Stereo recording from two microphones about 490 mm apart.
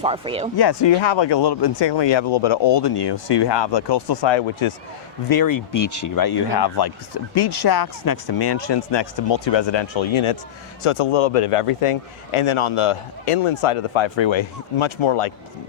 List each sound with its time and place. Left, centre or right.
0.0 s speech: centre
0.5 s speech: left
5.3 s speech: left
8.5 s speech: left
10.8 s a man's voice: left